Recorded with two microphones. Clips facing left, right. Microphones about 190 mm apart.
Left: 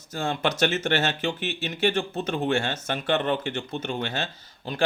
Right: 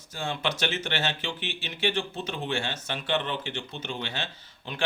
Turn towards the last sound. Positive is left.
turn(degrees=40)  # may be behind; listen again after turning